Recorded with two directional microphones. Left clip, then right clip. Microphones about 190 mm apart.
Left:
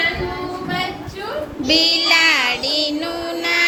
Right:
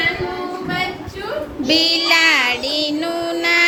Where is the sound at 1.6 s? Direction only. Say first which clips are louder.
Even; 20° right (ahead or behind).